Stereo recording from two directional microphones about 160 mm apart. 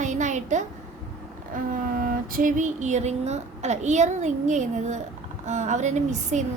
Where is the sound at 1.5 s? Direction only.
60° right (ahead or behind).